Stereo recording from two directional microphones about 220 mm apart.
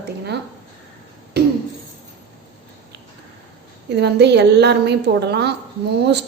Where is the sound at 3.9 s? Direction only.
50° right (ahead or behind).